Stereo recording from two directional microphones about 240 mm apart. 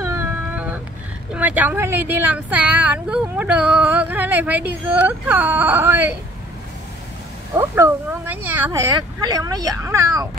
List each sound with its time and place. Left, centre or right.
0.0 s a sound: centre
1.3 s speech: centre
7.5 s speech: centre